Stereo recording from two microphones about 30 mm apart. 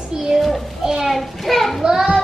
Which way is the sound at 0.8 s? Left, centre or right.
Centre.